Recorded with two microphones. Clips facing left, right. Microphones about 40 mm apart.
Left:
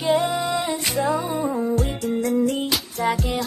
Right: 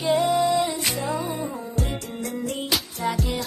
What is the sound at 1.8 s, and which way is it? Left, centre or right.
Music, centre.